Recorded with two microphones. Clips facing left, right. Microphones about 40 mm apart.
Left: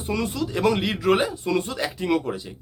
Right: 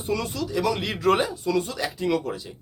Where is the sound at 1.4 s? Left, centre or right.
Left.